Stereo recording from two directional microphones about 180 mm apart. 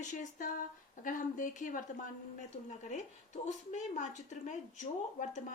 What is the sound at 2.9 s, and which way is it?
Speech, 40° left (ahead or behind).